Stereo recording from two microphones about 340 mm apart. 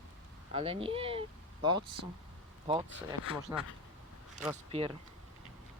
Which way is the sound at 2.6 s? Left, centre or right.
Centre.